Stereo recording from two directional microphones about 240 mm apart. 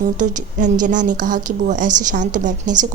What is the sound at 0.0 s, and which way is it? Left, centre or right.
Speech, right.